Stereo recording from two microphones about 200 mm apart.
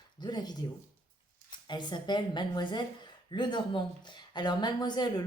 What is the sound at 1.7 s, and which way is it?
A woman's voice, 20° left (ahead or behind).